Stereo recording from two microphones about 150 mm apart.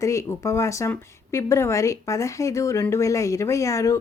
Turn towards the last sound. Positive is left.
turn(degrees=20)  # may be behind; listen again after turning